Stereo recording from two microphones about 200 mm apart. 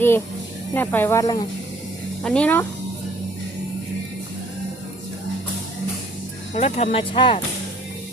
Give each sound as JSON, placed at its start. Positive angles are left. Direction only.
{"t": 0.7, "sound": "speech", "side_deg": 10}
{"t": 2.2, "sound": "speech", "side_deg": 5}
{"t": 6.5, "sound": "speech", "side_deg": 35}